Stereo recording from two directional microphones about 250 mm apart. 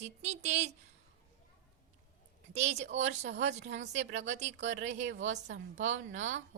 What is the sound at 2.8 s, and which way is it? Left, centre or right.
Speech, right.